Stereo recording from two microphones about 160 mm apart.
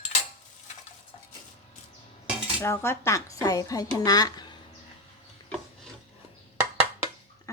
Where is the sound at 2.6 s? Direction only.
15° left (ahead or behind).